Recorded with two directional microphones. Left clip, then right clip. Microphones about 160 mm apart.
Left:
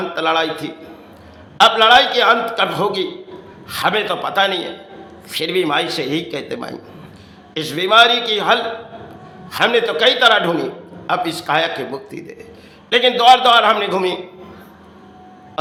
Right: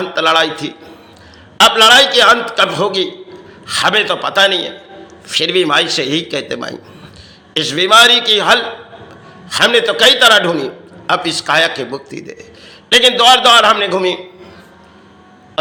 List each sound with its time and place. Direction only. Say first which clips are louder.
0.1 s a man's voice: right 6 dB; 15° right (ahead or behind)